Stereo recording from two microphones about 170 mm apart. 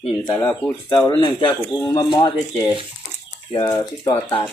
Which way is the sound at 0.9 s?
25° left (ahead or behind).